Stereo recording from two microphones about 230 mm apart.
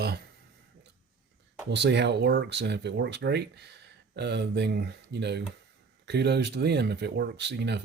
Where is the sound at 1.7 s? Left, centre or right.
Right.